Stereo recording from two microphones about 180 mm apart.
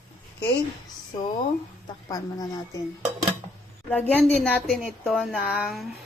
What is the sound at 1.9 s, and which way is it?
Speech, 20° left (ahead or behind).